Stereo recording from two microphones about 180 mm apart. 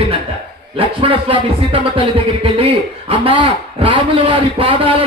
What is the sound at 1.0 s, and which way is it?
A man's voice, 30° right (ahead or behind).